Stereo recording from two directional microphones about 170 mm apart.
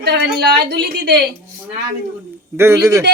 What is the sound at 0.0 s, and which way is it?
A woman's voice, 80° right.